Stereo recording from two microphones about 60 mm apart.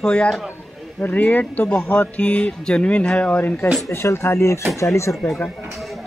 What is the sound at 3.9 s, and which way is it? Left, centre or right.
Speech, left.